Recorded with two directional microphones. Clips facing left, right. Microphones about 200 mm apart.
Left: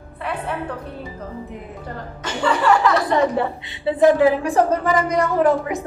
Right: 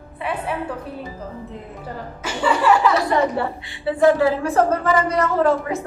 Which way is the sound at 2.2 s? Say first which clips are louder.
Even; 5° right (ahead or behind).